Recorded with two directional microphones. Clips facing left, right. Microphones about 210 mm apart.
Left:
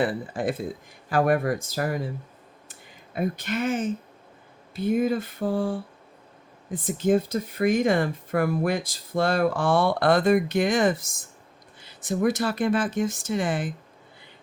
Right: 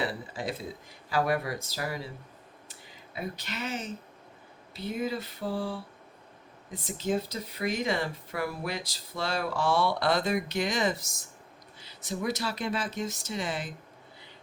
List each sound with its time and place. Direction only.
0.0 s speech: 50° left (ahead or behind)
2.6 s a sound: 50° left (ahead or behind)
4.7 s speech: 50° left (ahead or behind)